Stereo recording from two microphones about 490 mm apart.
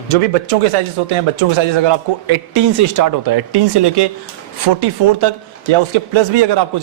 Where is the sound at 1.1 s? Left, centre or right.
Right.